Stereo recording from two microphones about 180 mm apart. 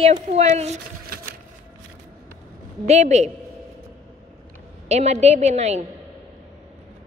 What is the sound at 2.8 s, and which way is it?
Speech, 40° right (ahead or behind).